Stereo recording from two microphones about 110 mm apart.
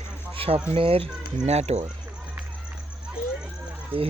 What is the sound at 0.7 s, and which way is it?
Speech, 60° right (ahead or behind).